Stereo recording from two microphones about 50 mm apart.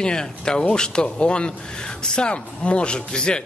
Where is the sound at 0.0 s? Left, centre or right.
Centre.